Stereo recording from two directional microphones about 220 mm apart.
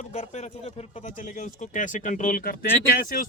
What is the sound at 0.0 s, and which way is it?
Speech, 30° left (ahead or behind).